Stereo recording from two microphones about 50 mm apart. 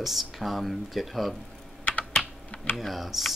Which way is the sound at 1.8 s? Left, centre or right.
Left.